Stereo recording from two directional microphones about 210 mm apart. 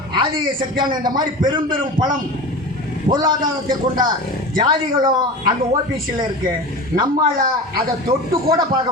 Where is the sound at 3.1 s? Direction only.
20° right (ahead or behind).